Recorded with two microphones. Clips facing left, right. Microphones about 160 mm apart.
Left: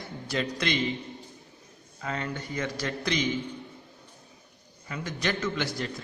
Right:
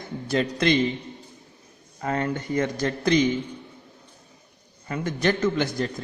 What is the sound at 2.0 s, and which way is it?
Speech, 45° right (ahead or behind).